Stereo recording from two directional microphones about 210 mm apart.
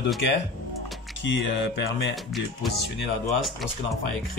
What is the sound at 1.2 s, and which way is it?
Speech, 60° left (ahead or behind).